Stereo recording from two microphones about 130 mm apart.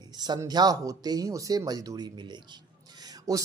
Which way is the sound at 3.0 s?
25° right (ahead or behind).